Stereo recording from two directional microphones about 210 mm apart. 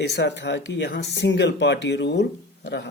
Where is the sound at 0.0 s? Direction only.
55° left (ahead or behind).